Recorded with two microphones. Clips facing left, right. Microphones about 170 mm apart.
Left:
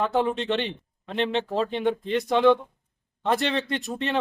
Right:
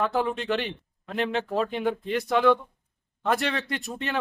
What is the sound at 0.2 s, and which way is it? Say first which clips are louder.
Speech: left 2 dB; 25° left (ahead or behind).